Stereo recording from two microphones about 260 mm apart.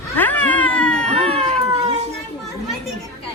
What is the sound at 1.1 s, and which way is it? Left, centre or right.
Cat, right.